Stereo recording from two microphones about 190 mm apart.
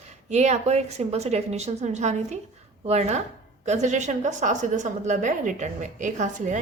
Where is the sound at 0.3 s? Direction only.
35° right (ahead or behind).